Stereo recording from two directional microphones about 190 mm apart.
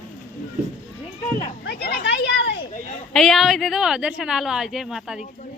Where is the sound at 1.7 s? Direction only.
60° left (ahead or behind).